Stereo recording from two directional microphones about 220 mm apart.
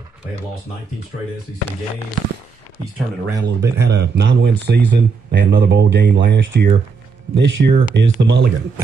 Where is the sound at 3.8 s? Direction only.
50° right (ahead or behind).